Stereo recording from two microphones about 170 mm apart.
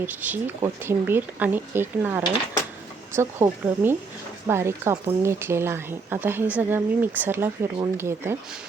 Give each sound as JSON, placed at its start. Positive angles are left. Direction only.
{"t": 0.0, "sound": "speech", "side_deg": -10}